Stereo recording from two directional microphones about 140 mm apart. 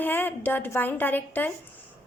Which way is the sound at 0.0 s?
15° left (ahead or behind).